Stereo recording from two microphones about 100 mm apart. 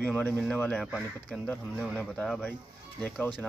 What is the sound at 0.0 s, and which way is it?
Speech, 15° left (ahead or behind).